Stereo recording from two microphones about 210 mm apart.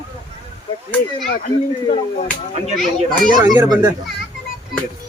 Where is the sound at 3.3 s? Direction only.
15° right (ahead or behind).